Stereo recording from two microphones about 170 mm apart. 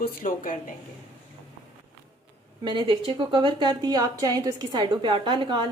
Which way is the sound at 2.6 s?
25° right (ahead or behind).